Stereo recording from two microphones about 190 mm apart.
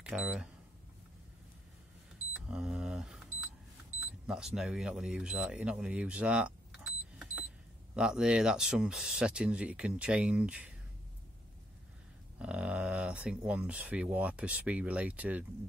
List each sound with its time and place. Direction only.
0.0 s speech: 5° right (ahead or behind)
2.4 s a sound: 5° right (ahead or behind)
4.3 s speech: centre (ahead or behind)
12.4 s speech: 5° right (ahead or behind)